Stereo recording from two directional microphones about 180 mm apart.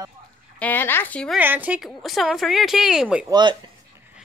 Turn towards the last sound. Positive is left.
turn(degrees=-25)  # may be behind; listen again after turning